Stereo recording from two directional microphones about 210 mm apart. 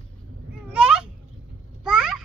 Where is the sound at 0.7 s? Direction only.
5° right (ahead or behind).